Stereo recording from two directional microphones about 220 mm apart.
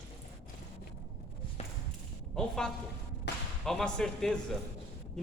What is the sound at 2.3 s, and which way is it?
Speech, centre (ahead or behind).